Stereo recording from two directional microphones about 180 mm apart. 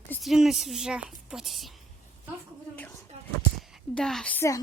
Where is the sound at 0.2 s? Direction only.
Centre (ahead or behind).